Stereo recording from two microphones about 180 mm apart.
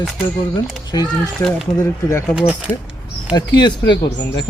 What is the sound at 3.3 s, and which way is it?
Speech, 25° left (ahead or behind).